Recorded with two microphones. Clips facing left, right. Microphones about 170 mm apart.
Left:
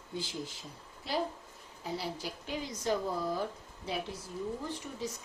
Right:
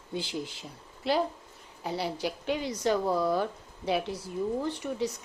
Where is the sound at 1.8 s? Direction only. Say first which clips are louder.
Right 6 dB; 70° right (ahead or behind).